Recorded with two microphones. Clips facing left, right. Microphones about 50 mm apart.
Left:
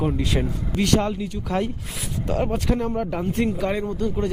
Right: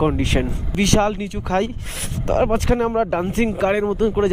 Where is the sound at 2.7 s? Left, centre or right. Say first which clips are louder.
Right 6 dB; right.